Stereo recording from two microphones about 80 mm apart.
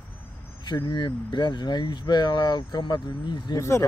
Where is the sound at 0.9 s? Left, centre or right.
Left.